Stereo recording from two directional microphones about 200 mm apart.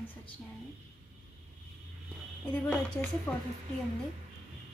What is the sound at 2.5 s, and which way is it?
Speech, 5° left (ahead or behind).